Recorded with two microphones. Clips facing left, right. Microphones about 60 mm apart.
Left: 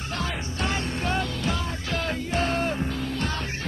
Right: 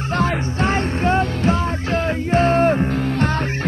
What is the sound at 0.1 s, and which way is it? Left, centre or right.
Music, right.